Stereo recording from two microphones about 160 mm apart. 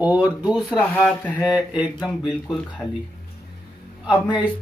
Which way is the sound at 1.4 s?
10° right (ahead or behind).